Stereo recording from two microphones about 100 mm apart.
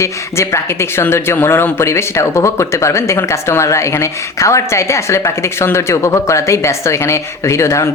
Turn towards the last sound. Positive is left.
turn(degrees=30)  # may be behind; listen again after turning